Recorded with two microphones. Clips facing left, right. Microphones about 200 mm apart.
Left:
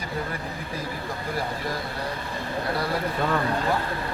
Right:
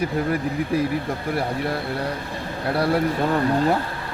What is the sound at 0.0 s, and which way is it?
Speech, 70° right (ahead or behind).